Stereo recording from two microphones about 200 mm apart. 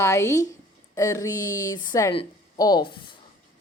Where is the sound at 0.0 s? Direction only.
15° left (ahead or behind).